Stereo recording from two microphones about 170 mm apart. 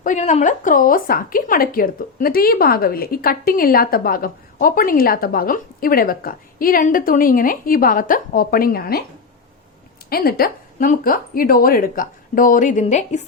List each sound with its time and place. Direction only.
0.0 s speech: 45° left (ahead or behind); by 9.0 s 65° left (ahead or behind)
10.1 s a woman's voice: 60° left (ahead or behind); by 13.2 s 45° left (ahead or behind)